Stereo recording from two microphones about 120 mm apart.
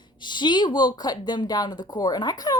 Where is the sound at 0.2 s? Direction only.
40° left (ahead or behind).